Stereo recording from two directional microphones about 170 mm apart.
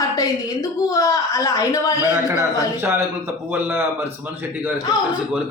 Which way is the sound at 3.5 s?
15° right (ahead or behind).